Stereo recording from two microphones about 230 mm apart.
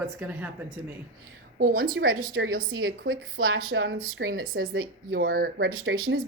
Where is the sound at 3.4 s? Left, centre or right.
Right.